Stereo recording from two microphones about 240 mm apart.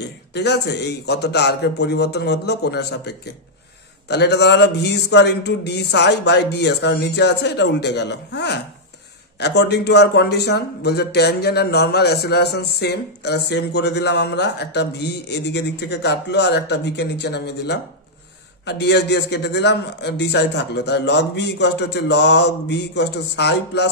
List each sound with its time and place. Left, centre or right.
0.3 s a man's voice: left